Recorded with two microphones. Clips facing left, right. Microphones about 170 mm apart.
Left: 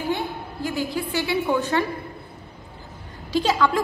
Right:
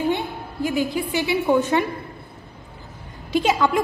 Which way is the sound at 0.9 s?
20° right (ahead or behind).